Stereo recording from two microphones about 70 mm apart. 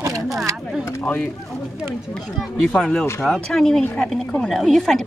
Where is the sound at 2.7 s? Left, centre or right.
Centre.